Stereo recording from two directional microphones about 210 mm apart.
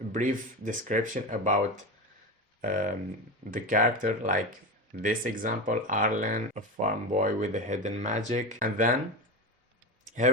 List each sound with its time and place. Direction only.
0.1 s speech: 40° right (ahead or behind)
10.2 s speech: 35° right (ahead or behind)